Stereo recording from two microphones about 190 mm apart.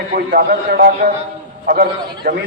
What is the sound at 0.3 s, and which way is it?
A man's voice, 50° right (ahead or behind).